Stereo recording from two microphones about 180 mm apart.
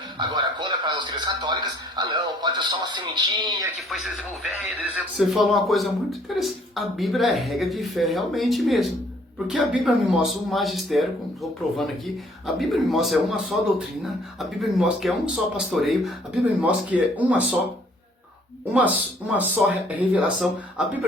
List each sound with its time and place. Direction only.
0.2 s a man's voice: 25° right (ahead or behind)
3.8 s speech: centre (ahead or behind)
12.5 s speech: centre (ahead or behind)
18.7 s speech: 10° right (ahead or behind)